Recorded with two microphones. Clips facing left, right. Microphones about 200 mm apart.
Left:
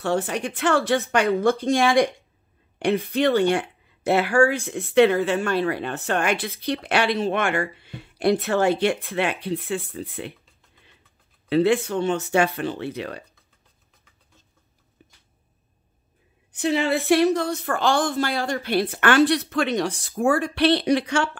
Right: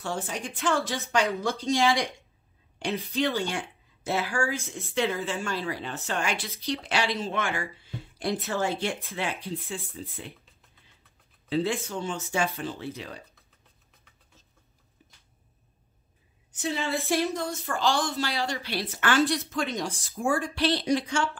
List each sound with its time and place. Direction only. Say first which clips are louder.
0.0 s speech: left 9 dB; 65° left (ahead or behind)
11.4 s speech: left 8 dB; 65° left (ahead or behind)
16.5 s speech: left 8 dB; 70° left (ahead or behind)